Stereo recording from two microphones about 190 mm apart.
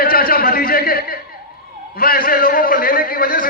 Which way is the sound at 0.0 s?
50° left (ahead or behind).